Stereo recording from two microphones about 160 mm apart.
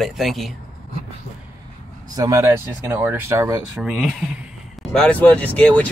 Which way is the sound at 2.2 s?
20° right (ahead or behind).